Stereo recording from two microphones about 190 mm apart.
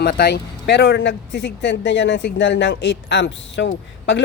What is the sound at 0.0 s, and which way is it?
Speech, 55° left (ahead or behind).